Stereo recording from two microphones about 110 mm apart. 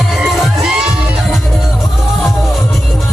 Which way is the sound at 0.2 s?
5° right (ahead or behind).